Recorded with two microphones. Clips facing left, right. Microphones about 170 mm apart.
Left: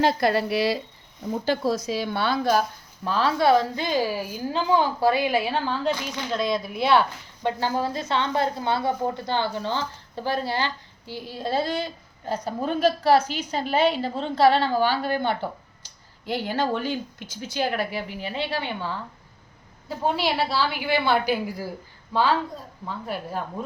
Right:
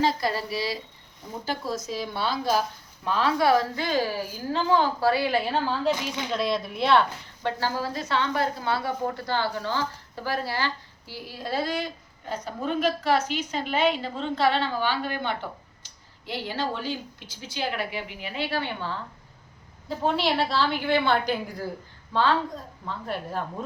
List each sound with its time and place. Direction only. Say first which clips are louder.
0.0 s a woman's voice: left 4 dB; 65° left (ahead or behind)
3.1 s a woman's voice: left 2 dB; 30° left (ahead or behind); by 7.0 s 5° left (ahead or behind)
7.4 s a woman's voice: left 3 dB; 20° left (ahead or behind)
20.1 s a woman's voice: right 1 dB; centre (ahead or behind)
23.0 s a woman's voice: left 1 dB; 5° left (ahead or behind)